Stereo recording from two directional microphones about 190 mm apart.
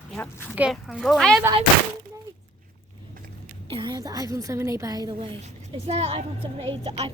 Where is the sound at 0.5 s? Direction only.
5° right (ahead or behind).